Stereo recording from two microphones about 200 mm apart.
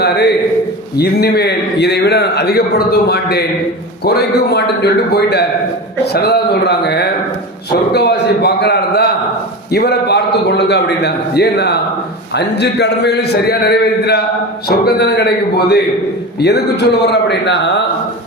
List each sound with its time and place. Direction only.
0.0 s a man's voice: 55° left (ahead or behind)